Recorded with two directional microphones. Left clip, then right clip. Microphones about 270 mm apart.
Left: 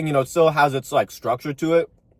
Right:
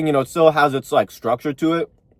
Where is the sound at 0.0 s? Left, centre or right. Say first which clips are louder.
Right 3 dB; centre.